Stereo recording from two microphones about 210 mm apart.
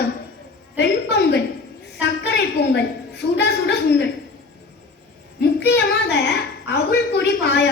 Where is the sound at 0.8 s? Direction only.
55° left (ahead or behind).